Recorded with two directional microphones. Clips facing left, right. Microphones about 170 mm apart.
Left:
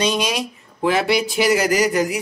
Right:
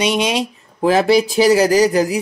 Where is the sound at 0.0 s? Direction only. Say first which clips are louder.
Right 3 dB; 20° right (ahead or behind).